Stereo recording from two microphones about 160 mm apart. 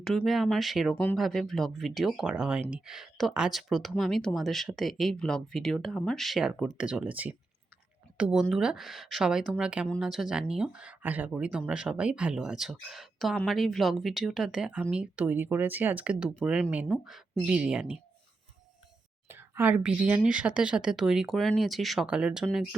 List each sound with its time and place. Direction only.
0.0 s speech: 5° left (ahead or behind)
19.3 s speech: 15° right (ahead or behind)